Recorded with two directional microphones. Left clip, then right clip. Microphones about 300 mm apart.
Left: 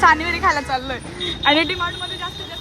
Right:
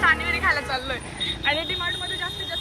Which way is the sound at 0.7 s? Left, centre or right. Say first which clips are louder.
Left 5 dB; centre.